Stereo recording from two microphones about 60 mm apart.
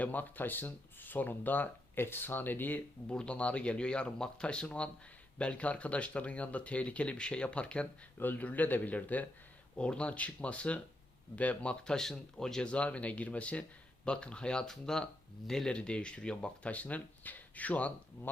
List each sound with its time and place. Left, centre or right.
0.0 s speech: left
3.1 s speech: centre
8.2 s speech: left
11.9 s speech: centre
15.7 s speech: centre